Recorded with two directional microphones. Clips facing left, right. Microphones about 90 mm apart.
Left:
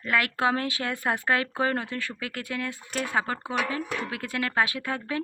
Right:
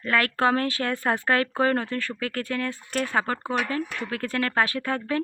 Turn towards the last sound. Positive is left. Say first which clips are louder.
# right 2 dB
turn(degrees=10)  # may be behind; listen again after turning